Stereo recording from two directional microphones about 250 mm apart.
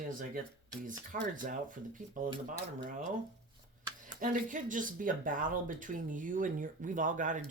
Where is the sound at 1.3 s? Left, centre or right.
Right.